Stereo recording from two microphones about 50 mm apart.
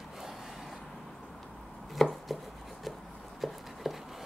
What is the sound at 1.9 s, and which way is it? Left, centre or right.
Chopping, centre.